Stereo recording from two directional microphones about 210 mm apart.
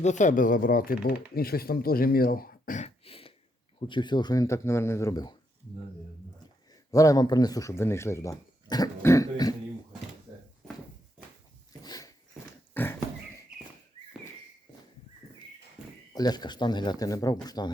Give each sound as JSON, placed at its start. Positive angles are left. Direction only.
{"t": 0.0, "sound": "speech", "side_deg": 35}
{"t": 6.9, "sound": "speech", "side_deg": 15}
{"t": 11.8, "sound": "dog", "side_deg": 20}
{"t": 12.7, "sound": "horse", "side_deg": 10}
{"t": 15.8, "sound": "a sound", "side_deg": -5}
{"t": 16.1, "sound": "speech", "side_deg": 20}